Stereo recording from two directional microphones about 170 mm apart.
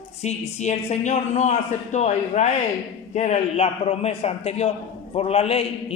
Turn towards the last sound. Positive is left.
turn(degrees=35)  # may be behind; listen again after turning